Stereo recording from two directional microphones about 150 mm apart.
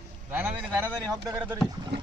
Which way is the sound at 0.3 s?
15° right (ahead or behind).